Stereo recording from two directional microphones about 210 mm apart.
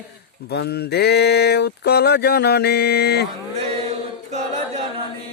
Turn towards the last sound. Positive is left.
turn(degrees=-30)  # may be behind; listen again after turning